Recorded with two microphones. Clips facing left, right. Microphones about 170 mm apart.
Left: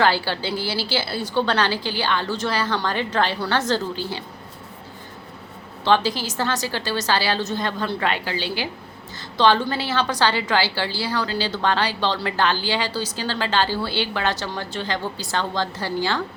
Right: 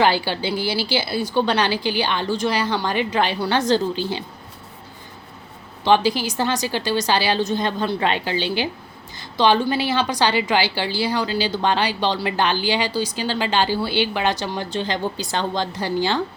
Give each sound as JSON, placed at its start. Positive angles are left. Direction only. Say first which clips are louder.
{"t": 0.0, "sound": "a woman's voice", "louder": "right 2 dB", "side_deg": -15}
{"t": 5.8, "sound": "a woman's voice", "louder": "right 3 dB", "side_deg": -15}